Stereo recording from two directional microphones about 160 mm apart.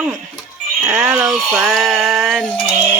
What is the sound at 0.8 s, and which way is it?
Speech, 5° right (ahead or behind).